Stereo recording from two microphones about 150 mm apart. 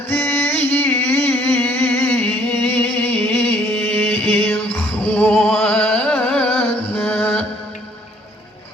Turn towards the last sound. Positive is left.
turn(degrees=5)  # may be behind; listen again after turning